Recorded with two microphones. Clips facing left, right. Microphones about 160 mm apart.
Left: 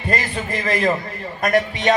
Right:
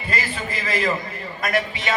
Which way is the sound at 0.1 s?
50° left (ahead or behind).